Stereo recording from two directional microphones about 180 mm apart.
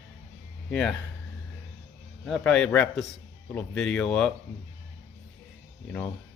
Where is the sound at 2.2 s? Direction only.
Centre (ahead or behind).